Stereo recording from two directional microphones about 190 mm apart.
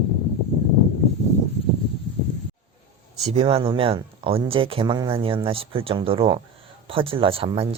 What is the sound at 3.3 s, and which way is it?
Speech, 30° right (ahead or behind).